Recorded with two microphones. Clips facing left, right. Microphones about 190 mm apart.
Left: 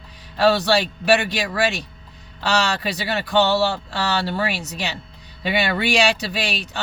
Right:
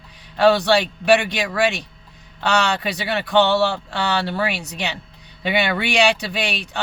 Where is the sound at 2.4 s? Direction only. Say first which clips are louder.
Right 1 dB; 35° left (ahead or behind).